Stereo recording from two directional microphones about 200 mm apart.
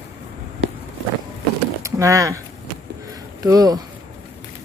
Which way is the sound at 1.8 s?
15° right (ahead or behind).